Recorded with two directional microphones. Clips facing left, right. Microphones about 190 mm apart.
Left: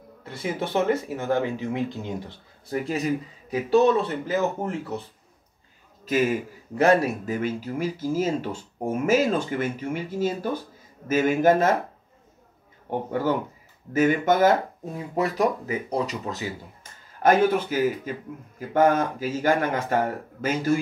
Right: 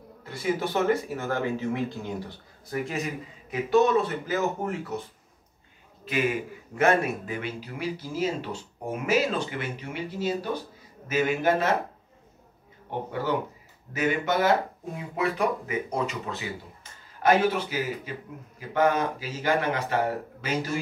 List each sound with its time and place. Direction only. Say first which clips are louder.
0.6 s speech: left 3 dB; 25° left (ahead or behind)
2.7 s a man's voice: left 5 dB; 35° left (ahead or behind)
6.0 s a man's voice: left 4 dB; 40° left (ahead or behind)
13.1 s a man's voice: left 3 dB; 50° left (ahead or behind)
17.2 s a man's voice: left 3 dB; 50° left (ahead or behind)